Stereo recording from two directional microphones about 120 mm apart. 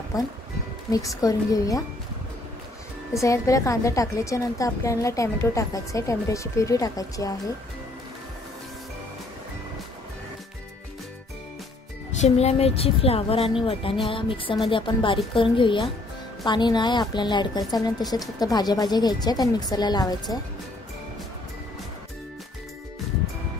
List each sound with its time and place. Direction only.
0.1 s a woman's voice: 30° left (ahead or behind)
3.1 s a woman's voice: 25° left (ahead or behind)
12.2 s speech: 60° left (ahead or behind)
14.0 s music: 45° left (ahead or behind)
16.4 s a woman's voice: 40° left (ahead or behind)